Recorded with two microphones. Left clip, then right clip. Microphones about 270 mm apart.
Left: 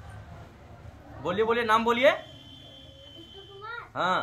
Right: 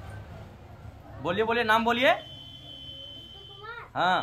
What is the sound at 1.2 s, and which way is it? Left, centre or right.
Speech, centre.